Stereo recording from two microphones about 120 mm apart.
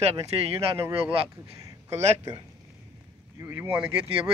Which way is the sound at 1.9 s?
65° right (ahead or behind).